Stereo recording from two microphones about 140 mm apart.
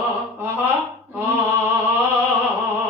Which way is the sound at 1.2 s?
15° right (ahead or behind).